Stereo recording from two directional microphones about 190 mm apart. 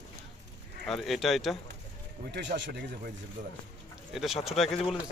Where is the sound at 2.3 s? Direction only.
70° right (ahead or behind).